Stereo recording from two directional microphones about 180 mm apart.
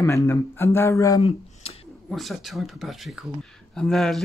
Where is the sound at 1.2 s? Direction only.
35° left (ahead or behind).